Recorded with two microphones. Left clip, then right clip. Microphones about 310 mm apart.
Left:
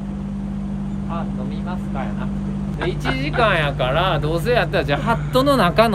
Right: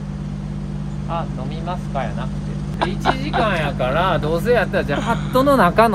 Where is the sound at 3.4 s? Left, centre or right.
Centre.